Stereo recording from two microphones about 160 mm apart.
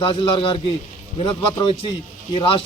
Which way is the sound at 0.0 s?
30° left (ahead or behind).